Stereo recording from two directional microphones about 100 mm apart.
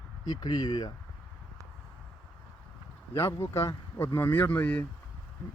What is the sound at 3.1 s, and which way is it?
Speech, 25° left (ahead or behind).